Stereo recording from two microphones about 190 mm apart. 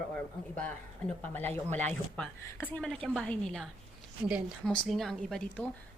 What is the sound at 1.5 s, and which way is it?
Speech, 35° right (ahead or behind).